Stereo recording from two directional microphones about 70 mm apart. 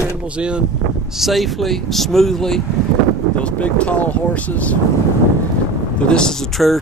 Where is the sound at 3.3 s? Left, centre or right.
Centre.